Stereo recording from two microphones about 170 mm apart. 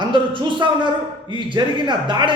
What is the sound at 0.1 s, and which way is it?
Speech, 30° right (ahead or behind).